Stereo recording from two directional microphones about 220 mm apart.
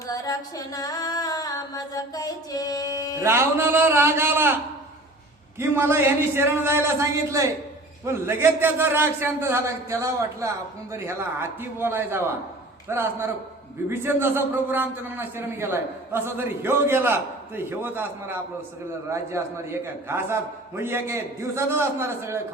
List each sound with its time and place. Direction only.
0.1 s music: 15° left (ahead or behind)
3.2 s a man's voice: 10° right (ahead or behind)
5.5 s a man's voice: 10° right (ahead or behind)